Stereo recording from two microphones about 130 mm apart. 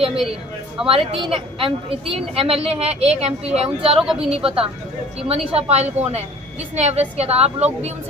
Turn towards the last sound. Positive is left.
turn(degrees=-55)  # may be behind; listen again after turning